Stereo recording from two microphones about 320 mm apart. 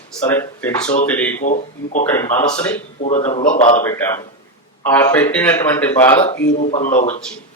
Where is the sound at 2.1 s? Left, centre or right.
Centre.